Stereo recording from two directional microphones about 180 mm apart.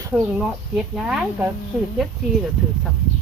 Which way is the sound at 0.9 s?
5° right (ahead or behind).